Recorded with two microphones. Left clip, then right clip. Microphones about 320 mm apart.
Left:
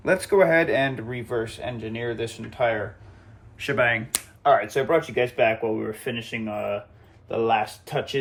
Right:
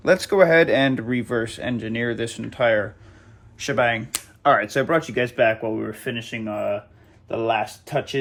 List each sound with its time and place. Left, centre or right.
0.0 s speech: centre
3.6 s speech: centre
4.4 s speech: right